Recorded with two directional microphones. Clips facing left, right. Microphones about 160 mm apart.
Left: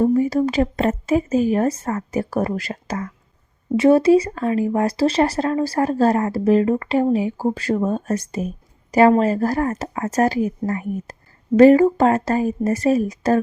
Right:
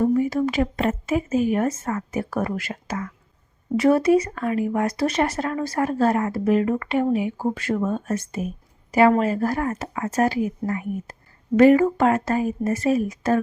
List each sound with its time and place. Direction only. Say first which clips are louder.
0.0 s speech: left 3 dB; 35° left (ahead or behind)
3.8 s speech: left 4 dB; 25° left (ahead or behind)